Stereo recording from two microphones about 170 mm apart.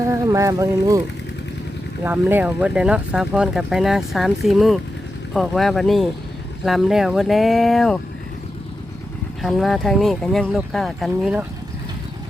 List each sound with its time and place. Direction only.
0.0 s speech: 15° right (ahead or behind)
2.0 s speech: 10° right (ahead or behind)
9.4 s speech: centre (ahead or behind)